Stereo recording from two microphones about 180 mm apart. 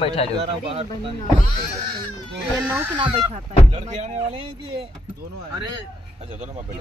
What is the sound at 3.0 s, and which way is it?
Speech, 30° right (ahead or behind).